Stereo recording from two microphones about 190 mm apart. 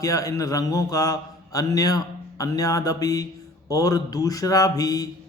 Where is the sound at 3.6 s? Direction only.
20° left (ahead or behind).